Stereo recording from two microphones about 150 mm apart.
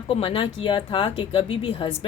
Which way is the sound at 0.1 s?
40° left (ahead or behind).